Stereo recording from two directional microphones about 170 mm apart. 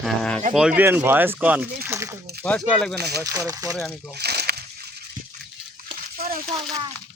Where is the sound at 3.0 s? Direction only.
75° right (ahead or behind).